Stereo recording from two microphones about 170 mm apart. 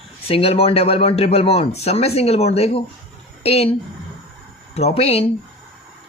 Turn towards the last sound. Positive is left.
turn(degrees=35)  # may be behind; listen again after turning